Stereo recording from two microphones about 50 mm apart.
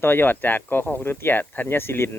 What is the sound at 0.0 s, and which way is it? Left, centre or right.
Speech, left.